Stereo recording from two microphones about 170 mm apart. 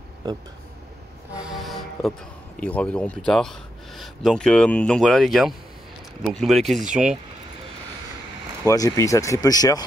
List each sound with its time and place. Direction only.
1.3 s music: 5° right (ahead or behind)
2.6 s a man's voice: 5° left (ahead or behind)
8.6 s speech: 20° left (ahead or behind)